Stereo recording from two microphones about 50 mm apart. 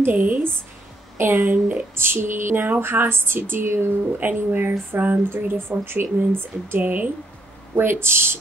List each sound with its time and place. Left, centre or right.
0.0 s speech: right
1.1 s speech: right
4.2 s speech: right
6.1 s speech: right
7.7 s speech: right